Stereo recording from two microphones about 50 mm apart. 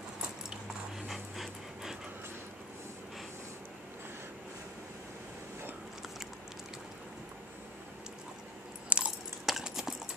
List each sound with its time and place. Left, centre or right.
1.0 s dog: centre
8.8 s keys jangling: right
9.5 s typing: centre